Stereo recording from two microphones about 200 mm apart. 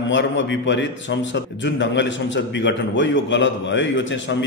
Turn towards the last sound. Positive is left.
turn(degrees=65)  # may be behind; listen again after turning